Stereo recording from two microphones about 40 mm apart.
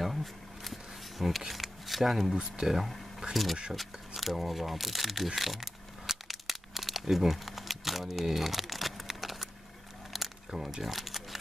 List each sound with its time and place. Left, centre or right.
0.0 s a sound: centre
1.5 s camera: centre
2.3 s speech: right
3.7 s crumpling: centre
10.1 s a sound: centre
10.5 s speech: centre